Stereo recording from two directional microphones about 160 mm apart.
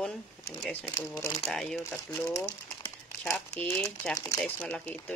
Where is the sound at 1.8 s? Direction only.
15° left (ahead or behind).